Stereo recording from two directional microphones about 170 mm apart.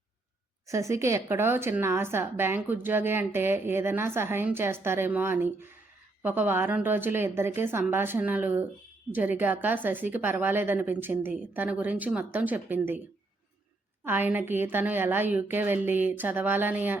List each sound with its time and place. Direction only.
0.7 s a woman's voice: 15° right (ahead or behind)
14.0 s a woman's voice: 10° right (ahead or behind)